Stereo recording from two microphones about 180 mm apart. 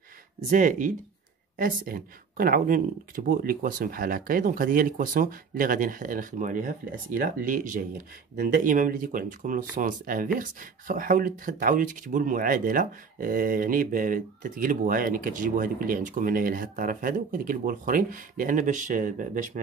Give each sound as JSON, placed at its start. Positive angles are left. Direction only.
{"t": 0.5, "sound": "speech", "side_deg": -50}